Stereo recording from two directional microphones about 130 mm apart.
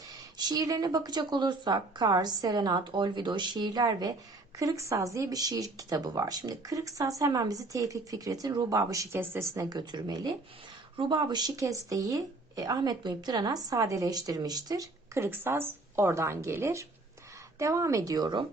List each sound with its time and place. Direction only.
0.3 s speech: 30° right (ahead or behind)